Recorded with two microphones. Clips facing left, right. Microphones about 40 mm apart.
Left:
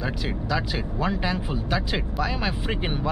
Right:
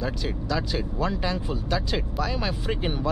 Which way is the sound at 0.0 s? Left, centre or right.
Centre.